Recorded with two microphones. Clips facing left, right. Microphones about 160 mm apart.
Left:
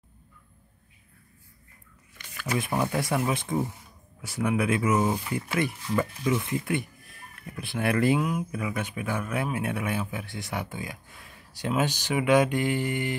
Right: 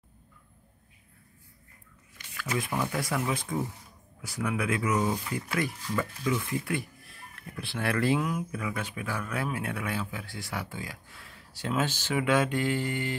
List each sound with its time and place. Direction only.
2.3 s speech: 30° left (ahead or behind)